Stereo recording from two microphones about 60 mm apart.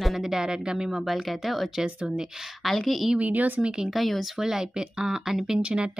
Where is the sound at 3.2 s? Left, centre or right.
Right.